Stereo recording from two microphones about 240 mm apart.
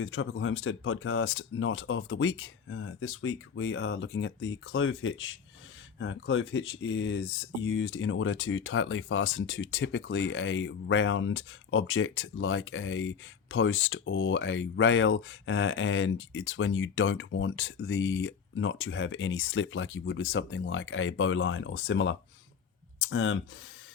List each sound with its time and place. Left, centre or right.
0.0 s speech: left